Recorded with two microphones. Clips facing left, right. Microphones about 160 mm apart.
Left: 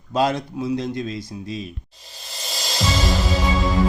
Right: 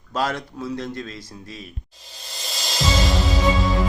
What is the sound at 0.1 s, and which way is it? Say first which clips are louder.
Speech: left 4 dB; 15° left (ahead or behind).